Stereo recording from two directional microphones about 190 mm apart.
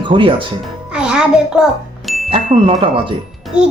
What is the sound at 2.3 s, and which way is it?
Speech, 25° right (ahead or behind).